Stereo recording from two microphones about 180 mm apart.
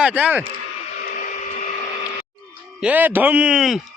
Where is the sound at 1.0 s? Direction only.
50° left (ahead or behind).